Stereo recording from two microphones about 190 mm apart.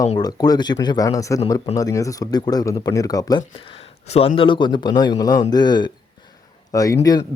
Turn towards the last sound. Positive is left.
turn(degrees=20)  # may be behind; listen again after turning